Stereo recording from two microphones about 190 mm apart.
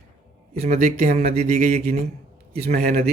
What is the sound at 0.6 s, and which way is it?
Speech, 40° right (ahead or behind).